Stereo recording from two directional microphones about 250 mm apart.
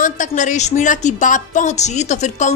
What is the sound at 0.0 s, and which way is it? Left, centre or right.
Speech, left.